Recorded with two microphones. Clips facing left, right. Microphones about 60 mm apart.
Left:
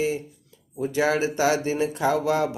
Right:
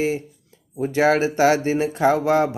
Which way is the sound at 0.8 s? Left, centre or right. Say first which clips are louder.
Right 5 dB; right.